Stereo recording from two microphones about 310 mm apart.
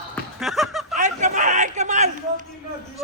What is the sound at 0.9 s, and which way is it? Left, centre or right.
A man's voice, right.